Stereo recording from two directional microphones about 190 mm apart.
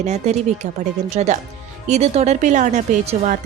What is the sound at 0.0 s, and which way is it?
Speech, 35° right (ahead or behind).